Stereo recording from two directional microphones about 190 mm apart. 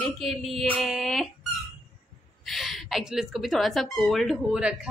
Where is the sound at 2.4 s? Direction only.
Centre (ahead or behind).